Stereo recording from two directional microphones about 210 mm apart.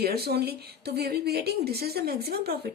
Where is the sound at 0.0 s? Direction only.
50° right (ahead or behind).